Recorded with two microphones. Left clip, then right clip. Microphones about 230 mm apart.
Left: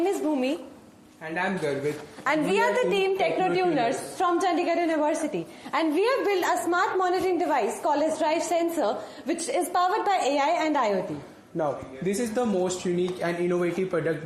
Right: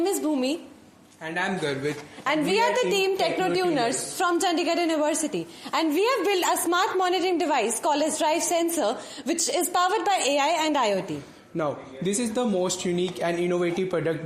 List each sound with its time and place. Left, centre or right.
0.0 s a woman's voice: right
2.5 s a woman's voice: right
11.5 s a man's voice: right